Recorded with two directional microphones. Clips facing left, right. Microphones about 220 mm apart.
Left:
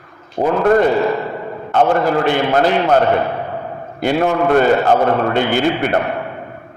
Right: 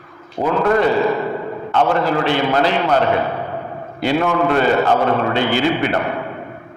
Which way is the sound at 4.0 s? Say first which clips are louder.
Left 2 dB; 50° left (ahead or behind).